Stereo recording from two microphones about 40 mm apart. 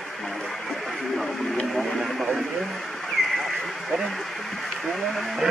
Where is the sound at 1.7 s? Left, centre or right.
Centre.